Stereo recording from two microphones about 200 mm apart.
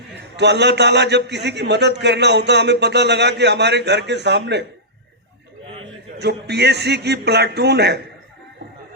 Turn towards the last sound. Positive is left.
turn(degrees=-55)  # may be behind; listen again after turning